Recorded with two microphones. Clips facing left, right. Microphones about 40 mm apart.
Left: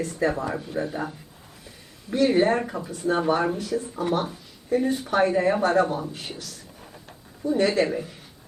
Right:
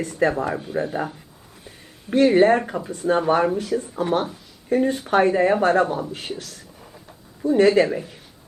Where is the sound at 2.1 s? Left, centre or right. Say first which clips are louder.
Right 5 dB; right.